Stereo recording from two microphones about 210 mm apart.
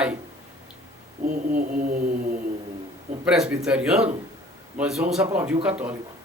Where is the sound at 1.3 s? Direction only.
45° right (ahead or behind).